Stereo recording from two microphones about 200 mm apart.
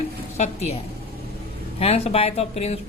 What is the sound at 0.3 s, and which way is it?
Speech, 35° left (ahead or behind).